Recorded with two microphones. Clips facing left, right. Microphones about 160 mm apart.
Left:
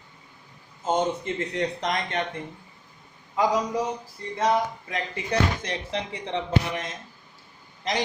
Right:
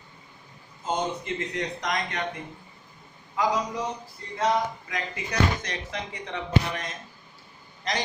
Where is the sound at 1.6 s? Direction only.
30° left (ahead or behind).